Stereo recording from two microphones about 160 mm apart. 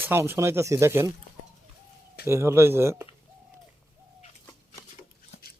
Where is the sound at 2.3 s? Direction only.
15° right (ahead or behind).